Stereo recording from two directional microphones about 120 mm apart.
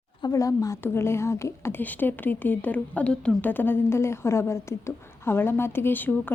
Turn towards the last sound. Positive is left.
turn(degrees=15)  # may be behind; listen again after turning